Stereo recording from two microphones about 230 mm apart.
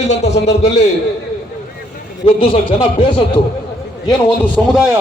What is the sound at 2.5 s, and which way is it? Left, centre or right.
Speech, left.